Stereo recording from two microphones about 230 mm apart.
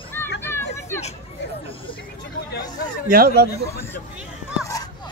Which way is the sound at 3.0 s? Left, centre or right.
Right.